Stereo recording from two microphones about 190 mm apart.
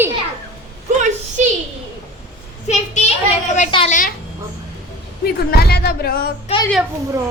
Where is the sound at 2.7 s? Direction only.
40° left (ahead or behind).